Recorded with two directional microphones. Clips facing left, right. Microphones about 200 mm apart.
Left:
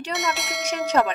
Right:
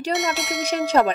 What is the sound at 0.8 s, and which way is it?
Speech, 30° right (ahead or behind).